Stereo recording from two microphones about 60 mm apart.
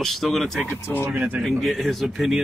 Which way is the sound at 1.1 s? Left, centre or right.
Right.